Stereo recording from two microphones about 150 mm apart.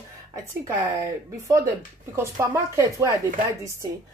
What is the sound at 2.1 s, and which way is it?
A woman's voice, 20° right (ahead or behind).